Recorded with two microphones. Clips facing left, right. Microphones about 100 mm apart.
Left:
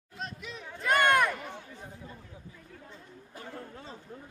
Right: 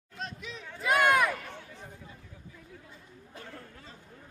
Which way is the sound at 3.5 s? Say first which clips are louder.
Left 5 dB; 25° left (ahead or behind).